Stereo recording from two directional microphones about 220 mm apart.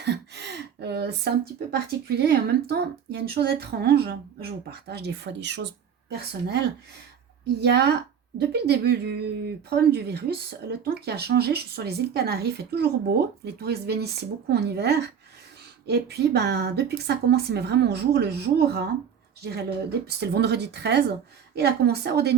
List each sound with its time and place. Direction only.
0.0 s speech: 50° right (ahead or behind)